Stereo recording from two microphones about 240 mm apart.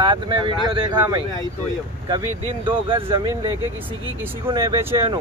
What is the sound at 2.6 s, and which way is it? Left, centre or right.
Speech, right.